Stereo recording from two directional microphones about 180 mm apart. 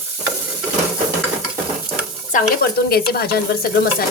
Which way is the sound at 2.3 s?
60° left (ahead or behind).